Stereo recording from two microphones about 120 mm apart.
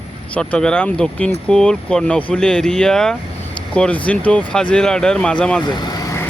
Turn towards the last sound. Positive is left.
turn(degrees=35)  # may be behind; listen again after turning